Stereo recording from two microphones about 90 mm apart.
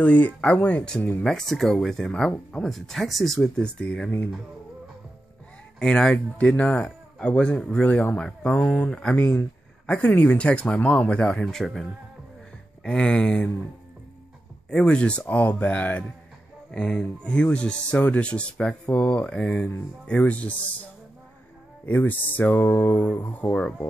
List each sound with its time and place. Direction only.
0.0 s speech: 15° left (ahead or behind)
5.8 s speech: 10° left (ahead or behind)
9.8 s speech: 10° left (ahead or behind)
11.4 s speech: centre (ahead or behind)
14.7 s speech: 10° left (ahead or behind)
21.8 s speech: 20° left (ahead or behind)